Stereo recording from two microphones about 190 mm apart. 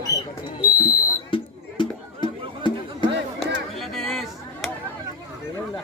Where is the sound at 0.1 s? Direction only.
15° left (ahead or behind).